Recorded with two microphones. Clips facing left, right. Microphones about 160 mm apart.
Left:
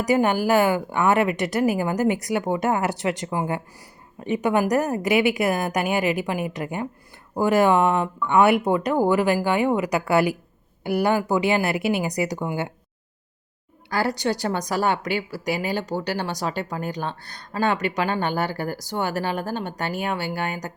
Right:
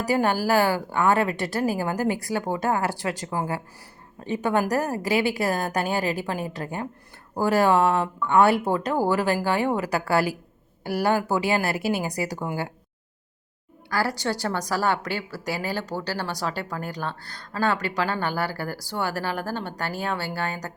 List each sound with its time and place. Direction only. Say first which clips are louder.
0.0 s a woman's voice: left 3 dB; 15° left (ahead or behind)
13.9 s a woman's voice: left 2 dB; 20° left (ahead or behind)